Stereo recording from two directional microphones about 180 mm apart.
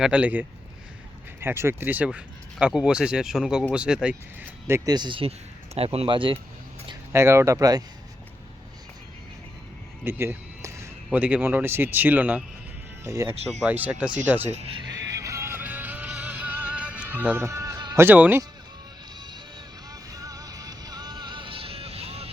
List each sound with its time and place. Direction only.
0.0 s speech: 5° right (ahead or behind)
4.9 s speech: 25° right (ahead or behind)
7.1 s speech: 15° right (ahead or behind)
10.0 s speech: 15° right (ahead or behind)
13.5 s speech: 5° right (ahead or behind)
14.5 s speech: 35° right (ahead or behind)
14.9 s music: 15° right (ahead or behind)
18.0 s speech: 10° right (ahead or behind)
19.9 s music: 20° right (ahead or behind)